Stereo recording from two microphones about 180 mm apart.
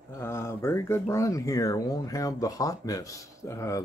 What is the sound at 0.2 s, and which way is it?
Speech, 15° left (ahead or behind).